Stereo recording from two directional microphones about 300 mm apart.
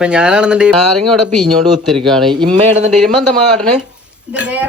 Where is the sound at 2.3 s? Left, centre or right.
Centre.